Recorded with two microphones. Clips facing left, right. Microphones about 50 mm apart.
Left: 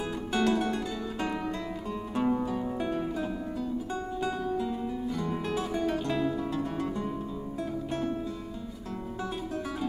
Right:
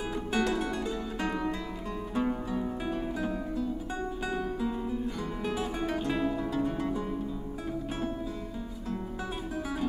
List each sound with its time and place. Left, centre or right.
0.0 s music: centre
1.9 s music: centre
3.9 s music: centre